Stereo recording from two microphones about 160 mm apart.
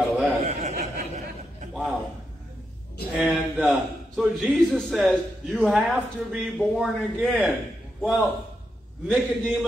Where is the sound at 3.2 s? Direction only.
5° right (ahead or behind).